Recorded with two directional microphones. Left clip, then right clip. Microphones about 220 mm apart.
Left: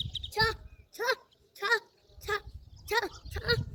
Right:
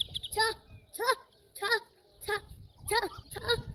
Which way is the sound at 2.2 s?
Centre (ahead or behind).